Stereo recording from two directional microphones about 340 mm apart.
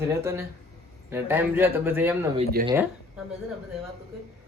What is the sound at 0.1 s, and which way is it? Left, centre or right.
Speech, centre.